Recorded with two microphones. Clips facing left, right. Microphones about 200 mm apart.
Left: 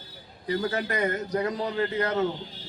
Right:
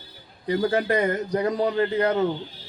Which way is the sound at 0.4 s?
30° right (ahead or behind).